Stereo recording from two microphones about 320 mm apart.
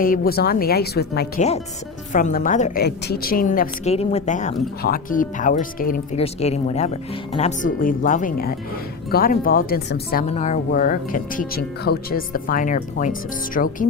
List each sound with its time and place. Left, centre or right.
0.0 s speech: left